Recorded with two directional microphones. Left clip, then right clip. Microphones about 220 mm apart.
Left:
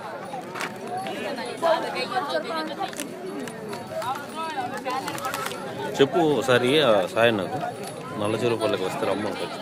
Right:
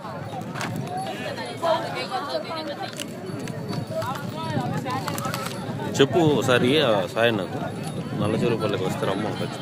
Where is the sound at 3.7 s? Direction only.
25° left (ahead or behind).